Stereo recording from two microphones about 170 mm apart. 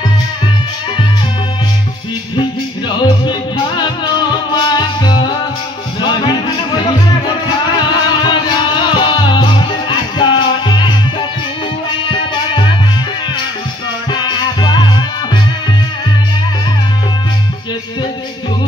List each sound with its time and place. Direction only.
3.0 s music: 25° left (ahead or behind)
12.1 s music: 30° left (ahead or behind)
14.1 s music: 25° left (ahead or behind)